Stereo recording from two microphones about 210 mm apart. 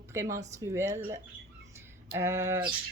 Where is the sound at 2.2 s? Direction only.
10° right (ahead or behind).